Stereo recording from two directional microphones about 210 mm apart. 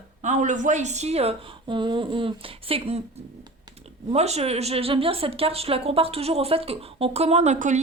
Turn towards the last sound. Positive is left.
turn(degrees=-35)  # may be behind; listen again after turning